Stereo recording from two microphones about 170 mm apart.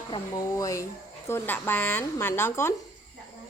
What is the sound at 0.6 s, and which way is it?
Speech, 20° left (ahead or behind).